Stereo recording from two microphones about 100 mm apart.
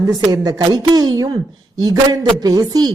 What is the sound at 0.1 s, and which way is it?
Speech, 40° right (ahead or behind).